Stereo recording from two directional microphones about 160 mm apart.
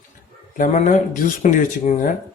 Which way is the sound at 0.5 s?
55° left (ahead or behind).